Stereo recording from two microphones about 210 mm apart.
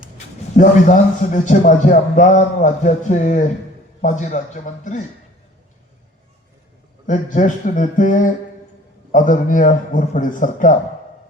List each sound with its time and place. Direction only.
0.5 s a man's voice: 35° left (ahead or behind)
7.1 s a man's voice: 35° left (ahead or behind)